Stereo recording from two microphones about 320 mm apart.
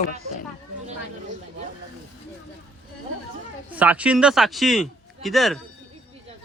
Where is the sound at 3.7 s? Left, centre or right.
Centre.